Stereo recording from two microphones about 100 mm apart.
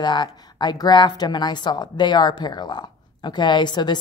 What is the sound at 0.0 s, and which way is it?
Speech, 50° left (ahead or behind).